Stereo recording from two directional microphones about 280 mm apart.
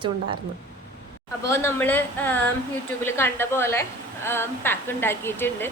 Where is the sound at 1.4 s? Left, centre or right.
Centre.